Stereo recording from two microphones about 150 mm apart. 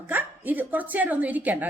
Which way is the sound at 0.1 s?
10° right (ahead or behind).